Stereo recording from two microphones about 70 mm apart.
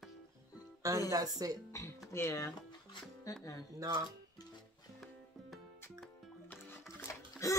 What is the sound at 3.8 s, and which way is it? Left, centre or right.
Speech, right.